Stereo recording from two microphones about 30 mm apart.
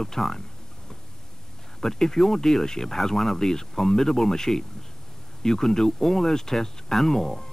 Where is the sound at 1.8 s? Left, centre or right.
Centre.